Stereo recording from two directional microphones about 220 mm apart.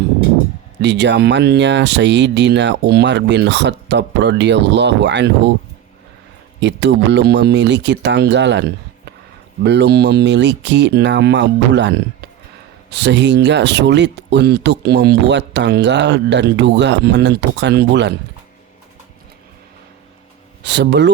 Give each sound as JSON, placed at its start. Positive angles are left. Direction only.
{"t": 0.8, "sound": "speech", "side_deg": -50}
{"t": 6.6, "sound": "speech", "side_deg": -50}
{"t": 20.6, "sound": "speech", "side_deg": -50}